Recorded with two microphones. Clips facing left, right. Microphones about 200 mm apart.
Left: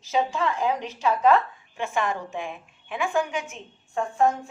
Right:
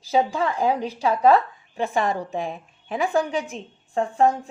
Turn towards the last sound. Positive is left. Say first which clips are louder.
# right 3 dB
turn(degrees=-35)  # may be behind; listen again after turning